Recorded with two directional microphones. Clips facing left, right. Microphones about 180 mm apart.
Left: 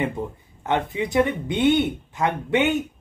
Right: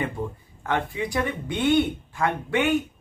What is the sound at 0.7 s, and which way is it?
Speech, 20° left (ahead or behind).